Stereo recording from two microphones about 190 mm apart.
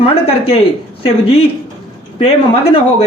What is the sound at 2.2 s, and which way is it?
Speech, 30° left (ahead or behind).